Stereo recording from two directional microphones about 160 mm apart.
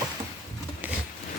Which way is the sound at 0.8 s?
10° right (ahead or behind).